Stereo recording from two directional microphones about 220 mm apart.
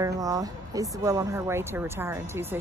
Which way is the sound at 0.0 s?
15° right (ahead or behind).